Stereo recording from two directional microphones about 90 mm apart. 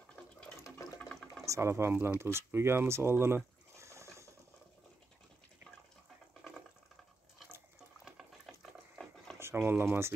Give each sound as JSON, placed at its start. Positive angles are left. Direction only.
{"t": 0.1, "sound": "water", "side_deg": 10}
{"t": 0.7, "sound": "water", "side_deg": 35}
{"t": 1.0, "sound": "water", "side_deg": 5}
{"t": 1.4, "sound": "speech", "side_deg": -35}
{"t": 8.0, "sound": "boiling", "side_deg": -5}
{"t": 9.4, "sound": "speech", "side_deg": -25}